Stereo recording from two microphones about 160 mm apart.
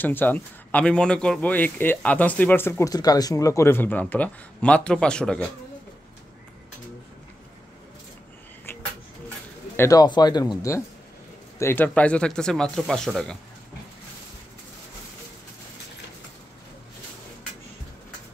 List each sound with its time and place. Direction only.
0.0 s speech: 10° left (ahead or behind)
9.8 s speech: 20° left (ahead or behind); by 13.4 s 5° left (ahead or behind)